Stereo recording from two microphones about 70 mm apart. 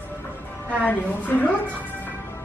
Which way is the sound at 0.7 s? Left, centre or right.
Left.